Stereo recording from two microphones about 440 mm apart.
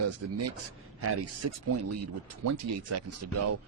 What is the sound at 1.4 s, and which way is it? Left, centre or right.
Speech, right.